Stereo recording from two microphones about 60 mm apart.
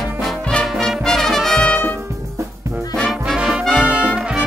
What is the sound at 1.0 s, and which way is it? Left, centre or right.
Brass instrument, centre.